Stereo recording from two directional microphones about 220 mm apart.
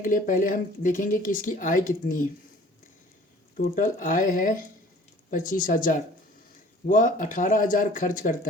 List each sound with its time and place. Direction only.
0.0 s speech: 35° left (ahead or behind)
3.6 s speech: 40° left (ahead or behind)